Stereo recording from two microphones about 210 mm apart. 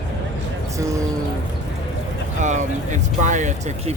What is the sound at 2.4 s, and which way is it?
Speech, 35° right (ahead or behind).